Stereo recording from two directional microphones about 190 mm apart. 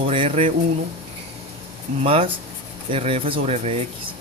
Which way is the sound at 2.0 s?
30° right (ahead or behind).